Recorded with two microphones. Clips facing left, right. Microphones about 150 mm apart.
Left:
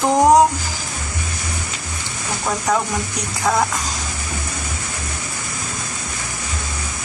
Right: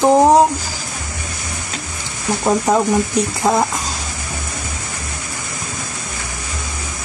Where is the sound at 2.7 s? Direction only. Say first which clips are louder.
Right 3 dB; 30° right (ahead or behind).